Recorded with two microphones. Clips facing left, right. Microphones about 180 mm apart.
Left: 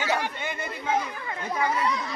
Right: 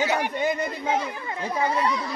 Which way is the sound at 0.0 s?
15° right (ahead or behind).